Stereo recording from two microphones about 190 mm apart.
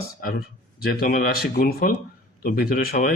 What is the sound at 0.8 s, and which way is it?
Speech, 50° left (ahead or behind).